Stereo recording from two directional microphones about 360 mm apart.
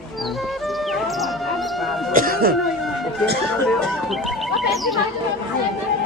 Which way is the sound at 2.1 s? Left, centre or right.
Right.